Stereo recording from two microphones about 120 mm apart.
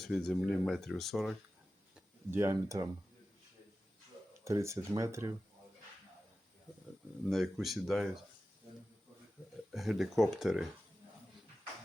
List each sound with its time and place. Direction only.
0.0 s speech: 5° left (ahead or behind)
2.3 s speech: 25° right (ahead or behind)
4.4 s speech: 25° right (ahead or behind)
7.3 s speech: centre (ahead or behind)
9.7 s speech: centre (ahead or behind)